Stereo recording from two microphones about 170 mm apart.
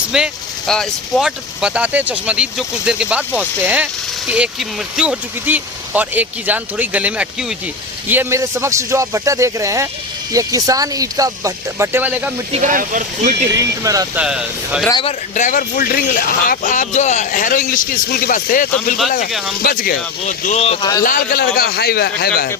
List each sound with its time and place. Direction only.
0.1 s speech: 5° right (ahead or behind)
4.9 s speech: 5° right (ahead or behind)
12.5 s speech: 45° right (ahead or behind)
13.5 s speech: 20° right (ahead or behind)
14.2 s speech: 5° right (ahead or behind)
15.4 s speech: 50° left (ahead or behind)
21.0 s a man's voice: 55° left (ahead or behind)